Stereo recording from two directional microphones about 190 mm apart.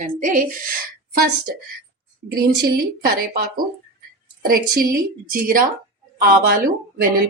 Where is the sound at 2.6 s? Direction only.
50° right (ahead or behind).